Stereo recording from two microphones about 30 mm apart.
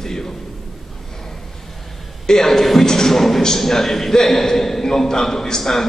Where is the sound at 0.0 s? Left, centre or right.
Centre.